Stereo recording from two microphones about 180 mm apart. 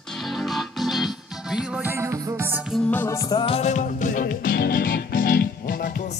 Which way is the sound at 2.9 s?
15° left (ahead or behind).